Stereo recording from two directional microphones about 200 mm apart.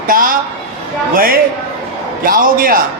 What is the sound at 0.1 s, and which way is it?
A man's voice, 45° right (ahead or behind).